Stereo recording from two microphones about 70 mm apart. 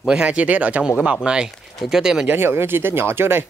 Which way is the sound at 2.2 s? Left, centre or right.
Right.